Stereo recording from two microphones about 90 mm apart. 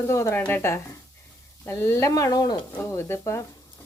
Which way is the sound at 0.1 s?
30° left (ahead or behind).